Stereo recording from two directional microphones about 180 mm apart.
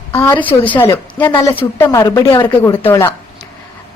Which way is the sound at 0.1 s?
15° left (ahead or behind).